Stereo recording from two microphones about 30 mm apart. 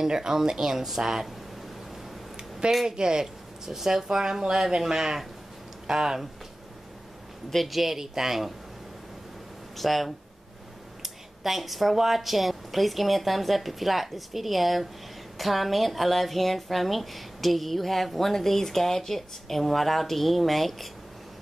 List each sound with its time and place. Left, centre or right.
0.0 s speech: centre
2.6 s speech: right; by 6.2 s centre
7.5 s speech: centre
9.8 s a woman's voice: centre